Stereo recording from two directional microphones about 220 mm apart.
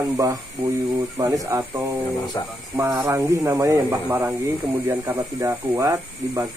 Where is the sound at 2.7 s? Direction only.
15° right (ahead or behind).